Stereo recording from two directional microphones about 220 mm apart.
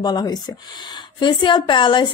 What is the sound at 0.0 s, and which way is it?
A woman's voice, 20° left (ahead or behind).